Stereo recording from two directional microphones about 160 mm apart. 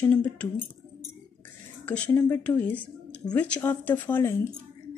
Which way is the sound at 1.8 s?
10° left (ahead or behind).